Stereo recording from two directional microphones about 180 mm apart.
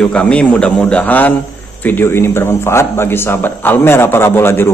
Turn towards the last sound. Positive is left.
turn(degrees=15)  # may be behind; listen again after turning